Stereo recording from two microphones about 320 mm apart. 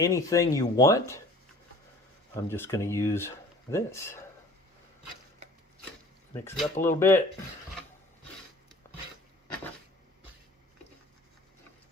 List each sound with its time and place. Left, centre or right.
0.0 s speech: centre
2.3 s speech: centre
6.4 s speech: centre